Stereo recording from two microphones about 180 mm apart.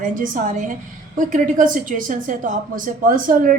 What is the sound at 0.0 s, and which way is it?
A woman's voice, 50° right (ahead or behind).